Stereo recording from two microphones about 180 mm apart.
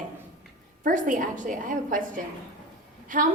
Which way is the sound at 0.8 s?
45° right (ahead or behind).